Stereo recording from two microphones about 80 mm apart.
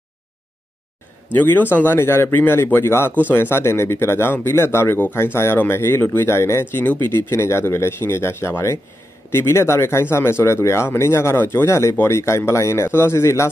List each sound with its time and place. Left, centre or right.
1.3 s speech: left